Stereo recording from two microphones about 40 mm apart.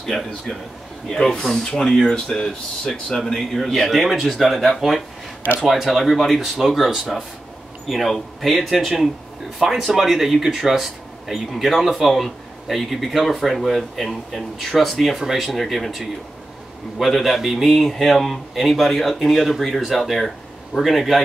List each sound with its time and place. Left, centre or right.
0.0 s a man's voice: centre
1.0 s speech: centre
1.4 s a man's voice: centre